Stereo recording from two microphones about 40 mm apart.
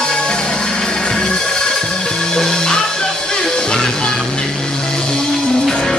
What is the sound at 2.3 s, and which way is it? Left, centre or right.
Music, centre.